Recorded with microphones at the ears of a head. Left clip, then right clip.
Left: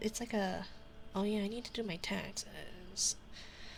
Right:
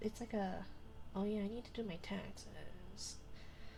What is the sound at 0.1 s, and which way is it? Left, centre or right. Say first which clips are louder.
Speech: left 6 dB; left.